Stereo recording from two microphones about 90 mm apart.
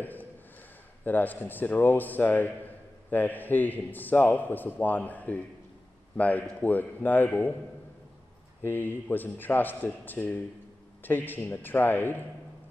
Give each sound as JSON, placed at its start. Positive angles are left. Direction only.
{"t": 0.0, "sound": "a sound", "side_deg": 20}
{"t": 1.0, "sound": "a man's voice", "side_deg": 20}
{"t": 8.6, "sound": "a man's voice", "side_deg": 20}